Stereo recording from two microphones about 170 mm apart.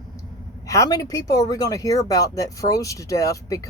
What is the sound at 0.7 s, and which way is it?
Speech, 20° left (ahead or behind).